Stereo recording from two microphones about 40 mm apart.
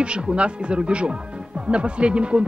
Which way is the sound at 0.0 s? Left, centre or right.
Right.